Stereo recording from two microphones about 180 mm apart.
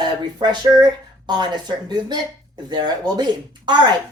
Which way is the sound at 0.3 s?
25° right (ahead or behind).